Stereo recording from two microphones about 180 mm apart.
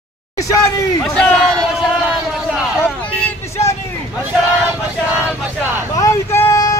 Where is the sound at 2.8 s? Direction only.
15° left (ahead or behind).